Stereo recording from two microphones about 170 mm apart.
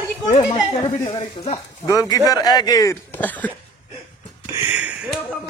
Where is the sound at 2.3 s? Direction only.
20° left (ahead or behind).